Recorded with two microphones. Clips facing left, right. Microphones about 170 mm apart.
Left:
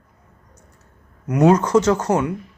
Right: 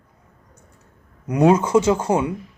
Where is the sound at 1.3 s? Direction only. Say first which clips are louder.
Left 1 dB; 10° right (ahead or behind).